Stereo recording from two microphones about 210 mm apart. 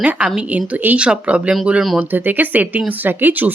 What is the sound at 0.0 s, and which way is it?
A woman's voice, 5° right (ahead or behind).